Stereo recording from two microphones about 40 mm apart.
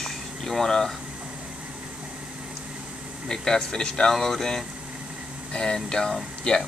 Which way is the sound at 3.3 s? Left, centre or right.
Centre.